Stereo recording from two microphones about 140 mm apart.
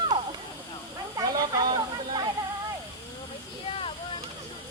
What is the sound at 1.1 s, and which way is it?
Hiss, 25° right (ahead or behind).